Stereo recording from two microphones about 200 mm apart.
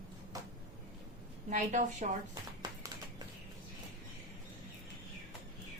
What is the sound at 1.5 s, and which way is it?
Speech, 40° right (ahead or behind).